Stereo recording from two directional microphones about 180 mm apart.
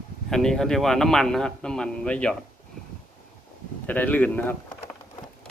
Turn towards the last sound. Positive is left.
turn(degrees=10)  # may be behind; listen again after turning